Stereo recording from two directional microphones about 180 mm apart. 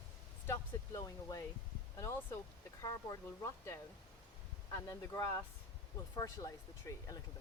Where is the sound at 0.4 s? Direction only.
15° left (ahead or behind).